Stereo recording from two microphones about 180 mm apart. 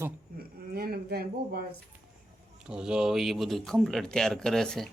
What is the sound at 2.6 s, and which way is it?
Speech, 5° right (ahead or behind).